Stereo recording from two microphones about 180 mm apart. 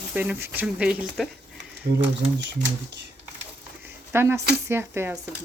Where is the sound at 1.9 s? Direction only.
70° right (ahead or behind).